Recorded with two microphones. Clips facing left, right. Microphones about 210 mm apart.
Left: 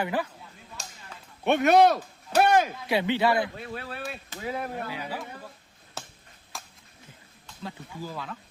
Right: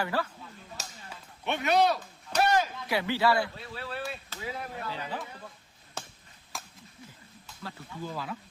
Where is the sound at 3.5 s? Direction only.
50° left (ahead or behind).